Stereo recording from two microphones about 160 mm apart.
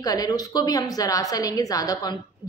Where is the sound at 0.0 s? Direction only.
20° left (ahead or behind).